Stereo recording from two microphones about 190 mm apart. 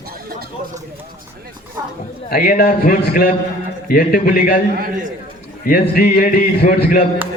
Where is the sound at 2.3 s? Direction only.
50° left (ahead or behind).